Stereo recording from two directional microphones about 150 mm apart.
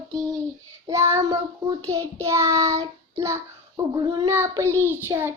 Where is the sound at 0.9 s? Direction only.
20° right (ahead or behind).